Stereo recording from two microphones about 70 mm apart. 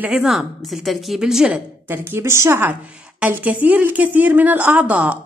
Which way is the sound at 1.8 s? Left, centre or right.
Right.